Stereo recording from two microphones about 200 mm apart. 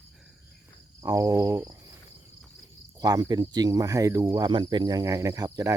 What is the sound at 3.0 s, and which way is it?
Speech, 20° right (ahead or behind).